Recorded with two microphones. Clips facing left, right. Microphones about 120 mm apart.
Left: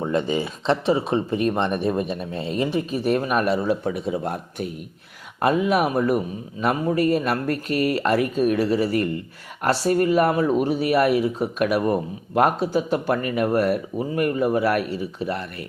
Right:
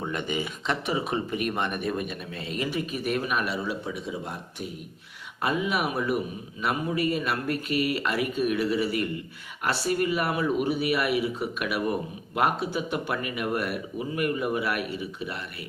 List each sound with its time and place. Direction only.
0.0 s a man's voice: 30° left (ahead or behind)